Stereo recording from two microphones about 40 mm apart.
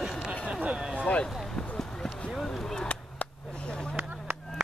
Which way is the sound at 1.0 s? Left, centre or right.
Left.